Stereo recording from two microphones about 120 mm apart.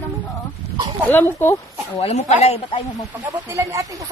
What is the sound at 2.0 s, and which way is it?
Speech, 65° left (ahead or behind).